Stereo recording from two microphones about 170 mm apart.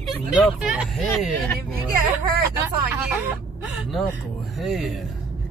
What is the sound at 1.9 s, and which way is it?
Speech, 60° right (ahead or behind).